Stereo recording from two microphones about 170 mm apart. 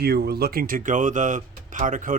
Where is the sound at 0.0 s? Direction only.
70° right (ahead or behind).